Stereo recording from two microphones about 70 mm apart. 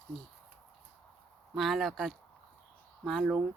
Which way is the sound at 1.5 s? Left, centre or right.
Centre.